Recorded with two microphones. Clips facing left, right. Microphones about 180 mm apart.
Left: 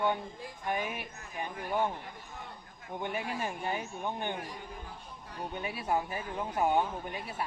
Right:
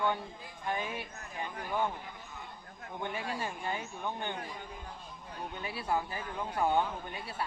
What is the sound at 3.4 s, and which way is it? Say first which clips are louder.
Speech: left 2 dB; 20° left (ahead or behind).